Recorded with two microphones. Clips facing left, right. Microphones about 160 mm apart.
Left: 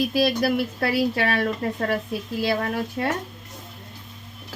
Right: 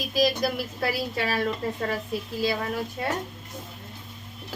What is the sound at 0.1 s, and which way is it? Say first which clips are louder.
A woman's voice: left 3 dB; 60° left (ahead or behind).